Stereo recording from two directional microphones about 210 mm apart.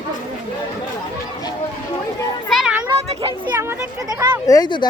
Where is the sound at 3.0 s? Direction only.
25° right (ahead or behind).